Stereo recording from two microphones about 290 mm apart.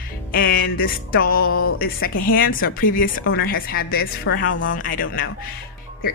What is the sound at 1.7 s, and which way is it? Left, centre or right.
A woman's voice, left.